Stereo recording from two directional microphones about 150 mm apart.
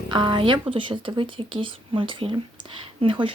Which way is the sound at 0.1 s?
30° right (ahead or behind).